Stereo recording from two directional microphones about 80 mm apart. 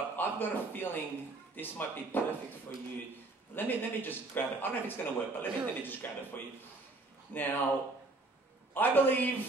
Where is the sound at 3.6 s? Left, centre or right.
Left.